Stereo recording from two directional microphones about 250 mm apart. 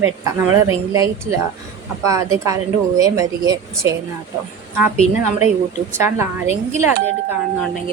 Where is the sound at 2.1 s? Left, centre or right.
Centre.